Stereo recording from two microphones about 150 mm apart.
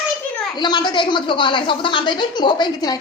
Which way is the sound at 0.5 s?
30° left (ahead or behind).